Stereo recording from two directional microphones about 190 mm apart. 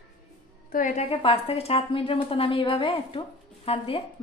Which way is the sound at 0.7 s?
45° left (ahead or behind).